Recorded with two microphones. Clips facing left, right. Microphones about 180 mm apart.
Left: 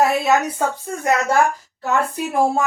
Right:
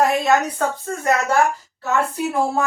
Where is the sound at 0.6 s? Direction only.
10° left (ahead or behind).